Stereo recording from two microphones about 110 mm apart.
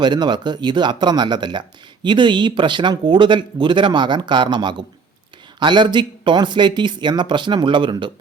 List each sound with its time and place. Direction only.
0.0 s speech: 40° right (ahead or behind)